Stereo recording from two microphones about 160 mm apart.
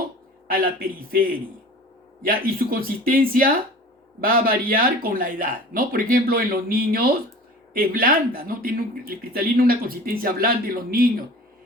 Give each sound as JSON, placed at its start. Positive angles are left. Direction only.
{"t": 0.4, "sound": "speech", "side_deg": -65}